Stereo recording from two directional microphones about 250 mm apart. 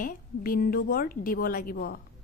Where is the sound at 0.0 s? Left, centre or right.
Left.